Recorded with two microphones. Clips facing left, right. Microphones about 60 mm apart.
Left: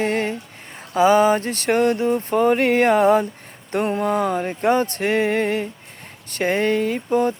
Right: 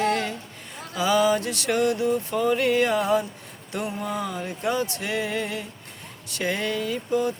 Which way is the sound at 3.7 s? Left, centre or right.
Left.